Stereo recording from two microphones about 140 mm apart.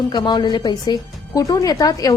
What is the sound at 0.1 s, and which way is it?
Speech, 30° left (ahead or behind).